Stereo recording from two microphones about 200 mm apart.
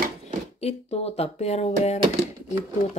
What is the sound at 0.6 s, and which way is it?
Speech, 30° left (ahead or behind).